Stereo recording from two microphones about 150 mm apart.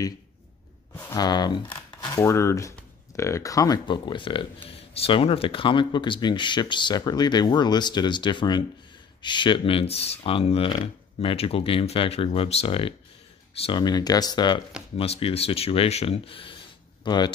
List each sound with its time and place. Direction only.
1.1 s speech: 25° left (ahead or behind)
2.0 s a sound: 30° left (ahead or behind)
2.2 s speech: 20° left (ahead or behind)